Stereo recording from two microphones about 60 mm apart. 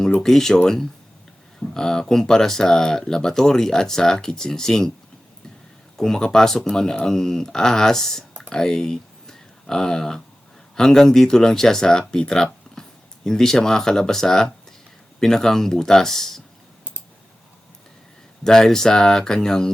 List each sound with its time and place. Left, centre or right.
0.2 s speech: centre
6.0 s speech: centre
8.4 s a sound: centre
10.8 s speech: centre
18.4 s speech: centre